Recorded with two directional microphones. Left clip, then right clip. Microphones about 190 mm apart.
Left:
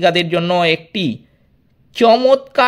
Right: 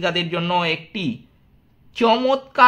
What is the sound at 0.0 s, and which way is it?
A man's voice, 35° left (ahead or behind).